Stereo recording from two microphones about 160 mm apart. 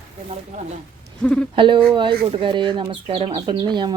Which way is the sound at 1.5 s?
30° right (ahead or behind).